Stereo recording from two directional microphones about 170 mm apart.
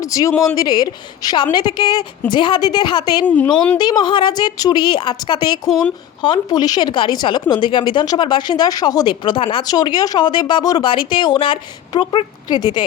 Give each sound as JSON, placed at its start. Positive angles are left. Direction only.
{"t": 0.0, "sound": "speech", "side_deg": 20}
{"t": 3.2, "sound": "speech", "side_deg": 10}
{"t": 3.8, "sound": "speech", "side_deg": 25}
{"t": 5.6, "sound": "speech", "side_deg": 0}
{"t": 6.2, "sound": "speech", "side_deg": 25}